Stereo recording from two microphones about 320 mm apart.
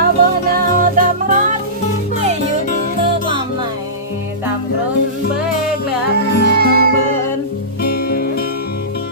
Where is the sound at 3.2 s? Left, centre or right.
Centre.